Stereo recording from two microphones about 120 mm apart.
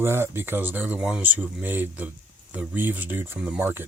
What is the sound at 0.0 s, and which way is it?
Speech, 20° right (ahead or behind).